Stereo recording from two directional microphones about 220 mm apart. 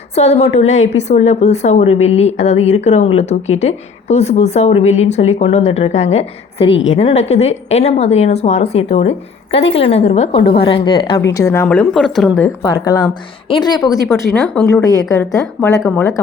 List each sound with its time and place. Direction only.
0.1 s a woman's voice: 30° left (ahead or behind)
6.7 s a woman's voice: 55° left (ahead or behind)
6.9 s a woman's voice: 30° left (ahead or behind)
10.4 s a woman's voice: 45° left (ahead or behind)
10.7 s a woman's voice: 20° left (ahead or behind); by 12.5 s centre (ahead or behind)
12.7 s a woman's voice: 20° left (ahead or behind)
14.3 s speech: 5° left (ahead or behind)
14.7 s speech: 15° left (ahead or behind)